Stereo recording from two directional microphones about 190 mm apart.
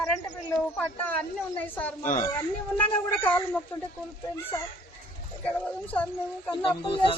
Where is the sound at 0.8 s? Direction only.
10° left (ahead or behind).